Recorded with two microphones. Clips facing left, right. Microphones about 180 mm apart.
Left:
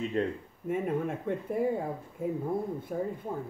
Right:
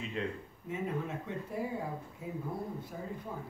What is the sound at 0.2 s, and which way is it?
Speech, 45° left (ahead or behind).